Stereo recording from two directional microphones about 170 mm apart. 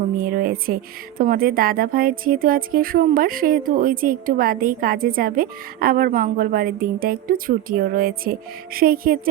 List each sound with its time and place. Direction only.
0.2 s a woman's voice: 55° right (ahead or behind)